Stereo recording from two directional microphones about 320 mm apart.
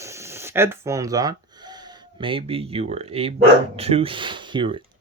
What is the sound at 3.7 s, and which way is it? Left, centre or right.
Speech, centre.